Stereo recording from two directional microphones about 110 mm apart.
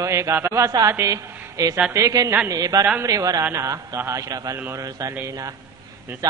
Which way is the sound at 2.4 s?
35° right (ahead or behind).